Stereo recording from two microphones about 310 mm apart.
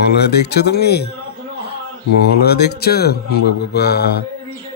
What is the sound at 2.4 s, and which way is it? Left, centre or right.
Speech, left.